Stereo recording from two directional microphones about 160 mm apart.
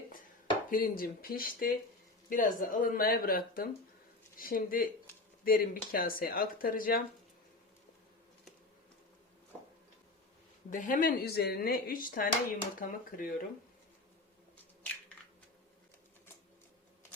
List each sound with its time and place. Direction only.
0.7 s speech: 65° left (ahead or behind)
10.7 s speech: 55° left (ahead or behind)